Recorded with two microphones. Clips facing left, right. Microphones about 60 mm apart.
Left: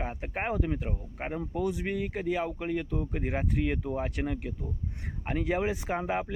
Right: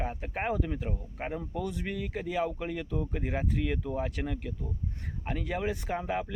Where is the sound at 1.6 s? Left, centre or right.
Centre.